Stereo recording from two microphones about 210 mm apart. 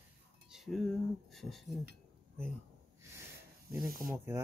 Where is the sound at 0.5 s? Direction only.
Centre (ahead or behind).